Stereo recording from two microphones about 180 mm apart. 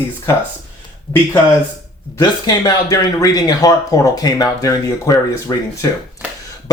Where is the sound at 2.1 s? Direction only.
20° left (ahead or behind).